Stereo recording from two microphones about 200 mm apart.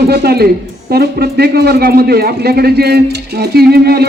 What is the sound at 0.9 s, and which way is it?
A man's voice, 50° right (ahead or behind).